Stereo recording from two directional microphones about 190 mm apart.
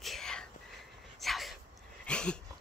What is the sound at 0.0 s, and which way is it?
Whispering, centre (ahead or behind).